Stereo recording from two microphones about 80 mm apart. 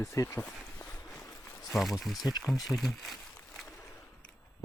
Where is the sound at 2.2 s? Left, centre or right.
Left.